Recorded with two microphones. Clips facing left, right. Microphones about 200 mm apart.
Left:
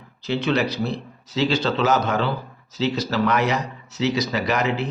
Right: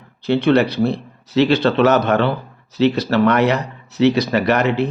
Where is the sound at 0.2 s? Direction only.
55° right (ahead or behind).